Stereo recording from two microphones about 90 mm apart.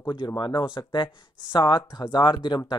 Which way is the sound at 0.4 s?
55° left (ahead or behind).